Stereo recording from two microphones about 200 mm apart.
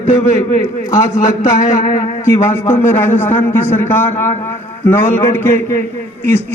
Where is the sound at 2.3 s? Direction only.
10° left (ahead or behind).